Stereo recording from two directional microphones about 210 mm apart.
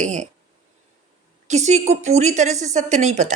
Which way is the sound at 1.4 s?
35° right (ahead or behind).